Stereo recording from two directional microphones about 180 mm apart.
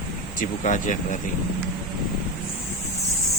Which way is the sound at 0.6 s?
45° left (ahead or behind).